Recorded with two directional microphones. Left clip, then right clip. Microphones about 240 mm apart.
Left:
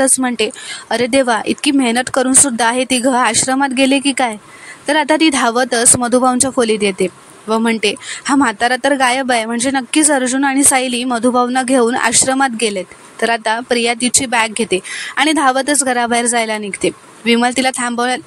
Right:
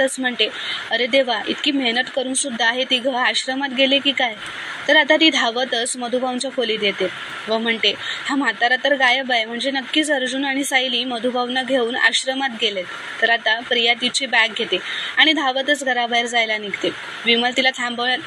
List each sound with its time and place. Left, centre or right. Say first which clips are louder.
0.0 s speech: left 4 dB; left